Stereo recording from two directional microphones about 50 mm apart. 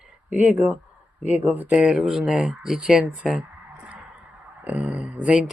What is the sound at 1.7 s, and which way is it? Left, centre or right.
Speech, right.